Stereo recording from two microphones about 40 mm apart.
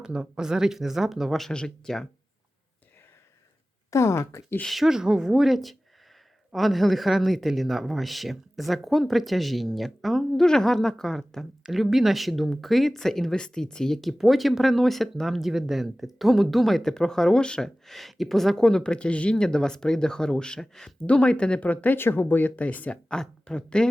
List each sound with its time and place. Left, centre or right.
0.0 s speech: right
1.5 s speech: centre
4.9 s speech: centre
5.4 s speech: centre
11.7 s speech: centre
13.3 s speech: centre
13.9 s speech: centre
17.8 s speech: centre; by 19.4 s left
19.4 s speech: centre
21.0 s speech: left
21.7 s speech: left
21.9 s speech: left
22.9 s speech: left